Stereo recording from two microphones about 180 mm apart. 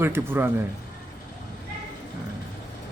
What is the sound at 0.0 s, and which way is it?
Speech, 10° right (ahead or behind).